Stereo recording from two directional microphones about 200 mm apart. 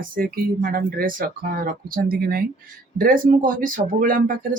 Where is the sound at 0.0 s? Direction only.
45° right (ahead or behind).